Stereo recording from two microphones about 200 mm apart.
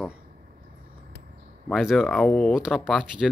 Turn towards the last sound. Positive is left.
turn(degrees=-5)  # may be behind; listen again after turning